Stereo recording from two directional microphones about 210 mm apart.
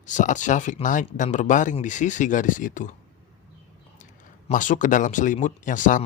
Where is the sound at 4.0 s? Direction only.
35° left (ahead or behind).